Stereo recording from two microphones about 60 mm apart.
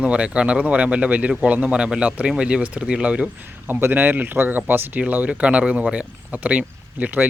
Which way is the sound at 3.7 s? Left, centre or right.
Right.